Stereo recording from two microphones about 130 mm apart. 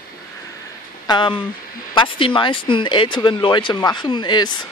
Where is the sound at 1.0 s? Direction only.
35° left (ahead or behind).